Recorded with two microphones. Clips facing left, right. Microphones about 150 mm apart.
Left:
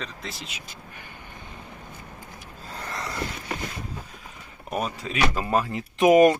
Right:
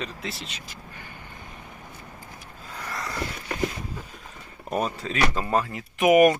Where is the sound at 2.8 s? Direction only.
25° left (ahead or behind).